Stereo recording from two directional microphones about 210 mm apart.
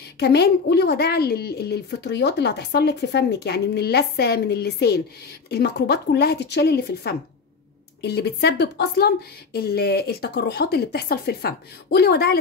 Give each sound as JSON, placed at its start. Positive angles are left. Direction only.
{"t": 0.2, "sound": "a woman's voice", "side_deg": 50}